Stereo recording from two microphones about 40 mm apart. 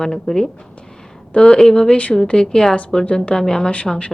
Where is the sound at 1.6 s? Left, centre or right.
Centre.